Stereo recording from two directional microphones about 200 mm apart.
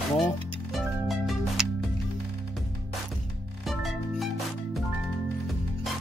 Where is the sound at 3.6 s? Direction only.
Centre (ahead or behind).